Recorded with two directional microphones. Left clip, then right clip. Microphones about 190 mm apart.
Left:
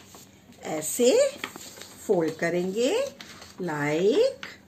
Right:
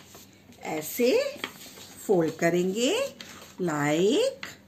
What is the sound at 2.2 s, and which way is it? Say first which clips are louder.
Speech: right 1 dB; 55° right (ahead or behind).